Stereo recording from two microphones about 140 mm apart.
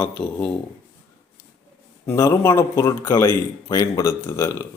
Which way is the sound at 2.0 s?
20° left (ahead or behind).